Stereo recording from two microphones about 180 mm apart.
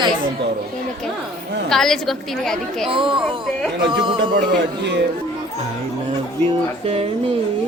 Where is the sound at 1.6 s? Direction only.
Centre (ahead or behind).